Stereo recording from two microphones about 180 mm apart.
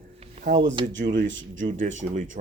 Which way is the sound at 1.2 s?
90° right.